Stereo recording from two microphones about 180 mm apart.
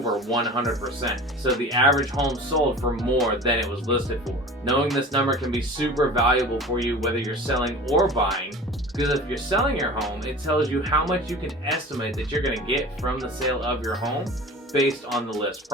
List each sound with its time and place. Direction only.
0.0 s speech: centre (ahead or behind)